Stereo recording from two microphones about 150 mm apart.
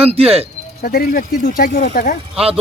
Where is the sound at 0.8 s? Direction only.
80° left.